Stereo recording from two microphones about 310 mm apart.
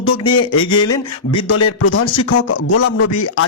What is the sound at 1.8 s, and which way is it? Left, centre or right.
Speech, left.